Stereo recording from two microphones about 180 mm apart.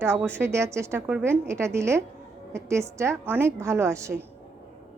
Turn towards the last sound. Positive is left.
turn(degrees=-15)  # may be behind; listen again after turning